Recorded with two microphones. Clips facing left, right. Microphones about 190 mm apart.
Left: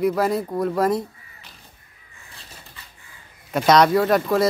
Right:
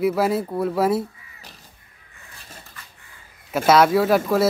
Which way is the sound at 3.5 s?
5° right (ahead or behind).